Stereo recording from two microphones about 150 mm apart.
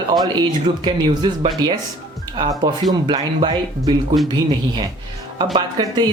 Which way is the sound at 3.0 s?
30° right (ahead or behind).